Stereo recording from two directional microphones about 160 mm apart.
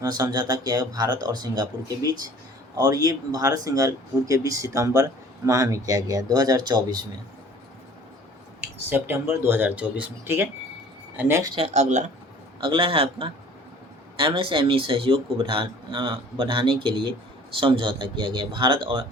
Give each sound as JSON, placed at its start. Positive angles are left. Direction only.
{"t": 0.0, "sound": "speech", "side_deg": -25}
{"t": 8.9, "sound": "speech", "side_deg": -15}
{"t": 11.5, "sound": "speech", "side_deg": -40}
{"t": 12.5, "sound": "speech", "side_deg": -30}